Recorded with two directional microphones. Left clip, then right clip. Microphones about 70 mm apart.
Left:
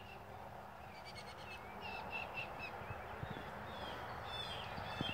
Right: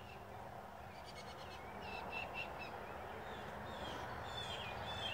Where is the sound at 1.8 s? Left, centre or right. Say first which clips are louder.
Left 1 dB; right.